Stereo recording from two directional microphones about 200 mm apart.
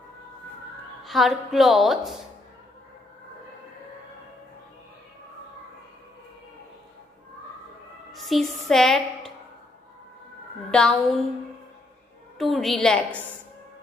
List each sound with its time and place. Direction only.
1.0 s a woman's voice: centre (ahead or behind)
8.1 s music: centre (ahead or behind)
10.7 s a woman's voice: 5° left (ahead or behind)
12.4 s a woman's voice: centre (ahead or behind)